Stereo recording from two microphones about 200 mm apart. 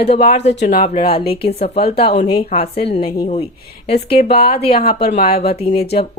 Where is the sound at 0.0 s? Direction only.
30° left (ahead or behind).